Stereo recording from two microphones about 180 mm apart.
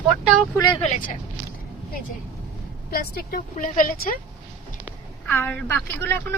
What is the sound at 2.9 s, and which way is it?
Speech, 55° left (ahead or behind).